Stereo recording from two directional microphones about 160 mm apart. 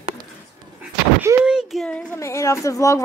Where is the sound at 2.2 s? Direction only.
20° left (ahead or behind).